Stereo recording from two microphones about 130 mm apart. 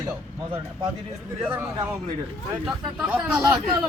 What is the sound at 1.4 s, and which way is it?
Speech, 15° right (ahead or behind).